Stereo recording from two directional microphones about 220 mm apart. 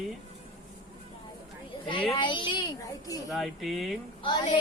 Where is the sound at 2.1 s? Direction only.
20° left (ahead or behind).